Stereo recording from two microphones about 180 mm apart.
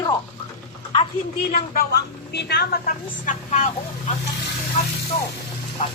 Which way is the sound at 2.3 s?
65° left (ahead or behind).